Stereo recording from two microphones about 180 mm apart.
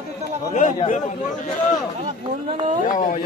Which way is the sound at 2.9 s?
45° left (ahead or behind).